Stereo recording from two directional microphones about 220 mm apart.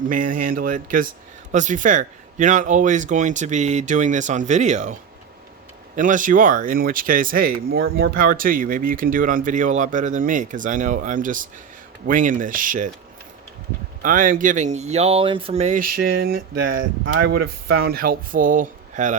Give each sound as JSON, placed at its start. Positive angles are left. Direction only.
{"t": 0.1, "sound": "speech", "side_deg": -40}
{"t": 6.0, "sound": "speech", "side_deg": -35}
{"t": 14.0, "sound": "speech", "side_deg": -40}
{"t": 17.1, "sound": "speech", "side_deg": -55}